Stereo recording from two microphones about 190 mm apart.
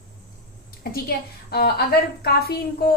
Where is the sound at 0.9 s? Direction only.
55° left (ahead or behind).